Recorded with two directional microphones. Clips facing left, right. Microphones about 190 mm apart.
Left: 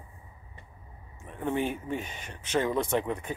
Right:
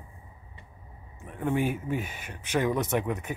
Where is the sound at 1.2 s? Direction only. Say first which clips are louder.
Right 2 dB; 10° right (ahead or behind).